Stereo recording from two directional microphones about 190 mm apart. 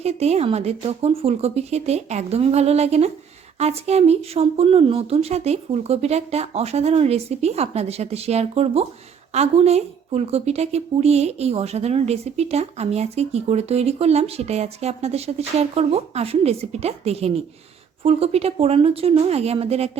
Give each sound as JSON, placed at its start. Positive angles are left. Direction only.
{"t": 0.0, "sound": "a woman's voice", "side_deg": -35}